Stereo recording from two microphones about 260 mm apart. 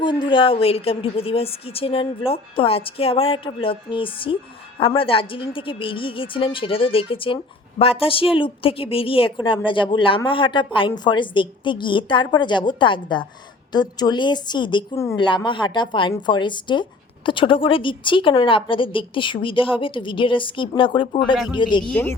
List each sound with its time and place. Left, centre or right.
0.0 s a woman's voice: centre